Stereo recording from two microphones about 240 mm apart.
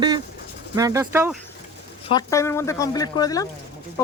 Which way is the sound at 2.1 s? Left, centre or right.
Centre.